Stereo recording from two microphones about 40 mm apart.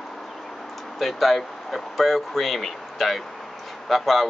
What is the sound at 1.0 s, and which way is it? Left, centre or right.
Speech, centre.